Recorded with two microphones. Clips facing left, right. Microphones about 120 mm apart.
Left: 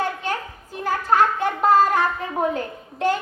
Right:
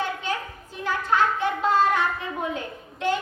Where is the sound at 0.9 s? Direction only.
45° left (ahead or behind).